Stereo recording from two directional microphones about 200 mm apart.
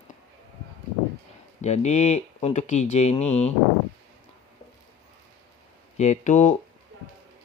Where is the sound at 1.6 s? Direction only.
35° left (ahead or behind).